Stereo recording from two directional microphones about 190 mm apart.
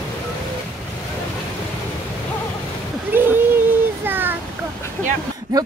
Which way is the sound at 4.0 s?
10° right (ahead or behind).